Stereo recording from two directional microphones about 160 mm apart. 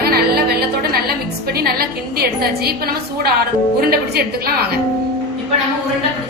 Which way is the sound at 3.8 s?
75° right (ahead or behind).